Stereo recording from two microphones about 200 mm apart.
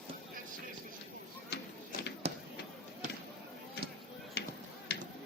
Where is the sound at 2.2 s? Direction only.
30° right (ahead or behind).